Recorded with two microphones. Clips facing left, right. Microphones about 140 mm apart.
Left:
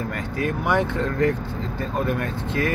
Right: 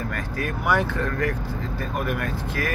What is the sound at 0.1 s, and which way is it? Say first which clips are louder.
Speech: left 3 dB; 20° left (ahead or behind).